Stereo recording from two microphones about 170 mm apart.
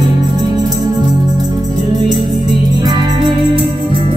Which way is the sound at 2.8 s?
25° right (ahead or behind).